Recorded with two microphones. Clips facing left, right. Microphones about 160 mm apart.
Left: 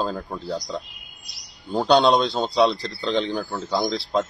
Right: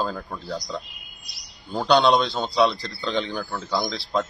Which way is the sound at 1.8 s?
30° left (ahead or behind).